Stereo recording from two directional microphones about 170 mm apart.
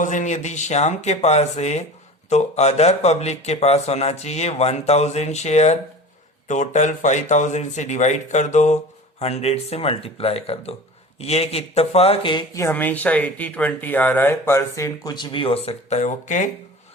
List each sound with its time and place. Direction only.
0.0 s speech: 45° left (ahead or behind); by 12.6 s 30° left (ahead or behind)
12.6 s speech: 10° left (ahead or behind); by 16.5 s 45° left (ahead or behind)